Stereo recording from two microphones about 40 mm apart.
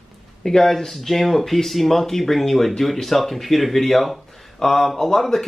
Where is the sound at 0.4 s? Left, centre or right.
Centre.